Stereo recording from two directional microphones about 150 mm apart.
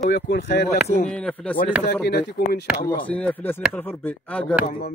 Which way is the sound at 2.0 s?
90° left.